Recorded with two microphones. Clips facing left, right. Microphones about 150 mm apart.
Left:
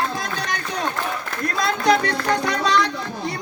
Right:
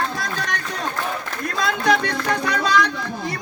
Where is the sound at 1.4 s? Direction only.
Centre (ahead or behind).